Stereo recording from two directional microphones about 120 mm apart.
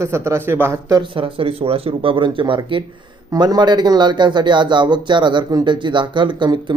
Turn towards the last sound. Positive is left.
turn(degrees=-40)  # may be behind; listen again after turning